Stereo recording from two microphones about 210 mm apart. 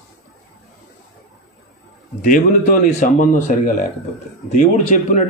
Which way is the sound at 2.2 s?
40° left (ahead or behind).